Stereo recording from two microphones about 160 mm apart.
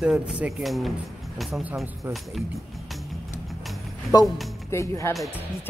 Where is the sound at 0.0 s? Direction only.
5° right (ahead or behind).